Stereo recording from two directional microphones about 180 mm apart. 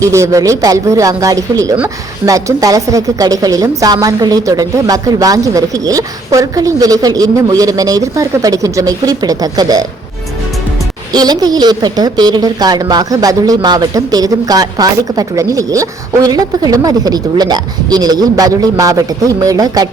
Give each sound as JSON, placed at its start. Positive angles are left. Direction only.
{"t": 0.0, "sound": "a woman's voice", "side_deg": -15}
{"t": 11.1, "sound": "a woman's voice", "side_deg": -20}